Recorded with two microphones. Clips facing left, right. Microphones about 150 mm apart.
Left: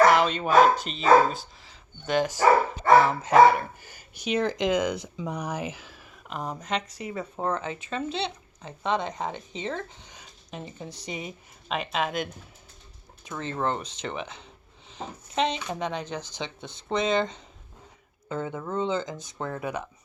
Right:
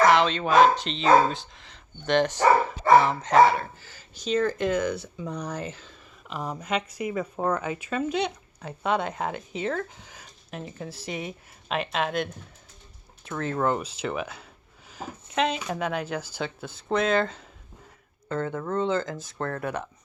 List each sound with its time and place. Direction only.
0.1 s speech: 10° left (ahead or behind)
4.3 s speech: 75° left (ahead or behind)
4.7 s speech: 15° left (ahead or behind)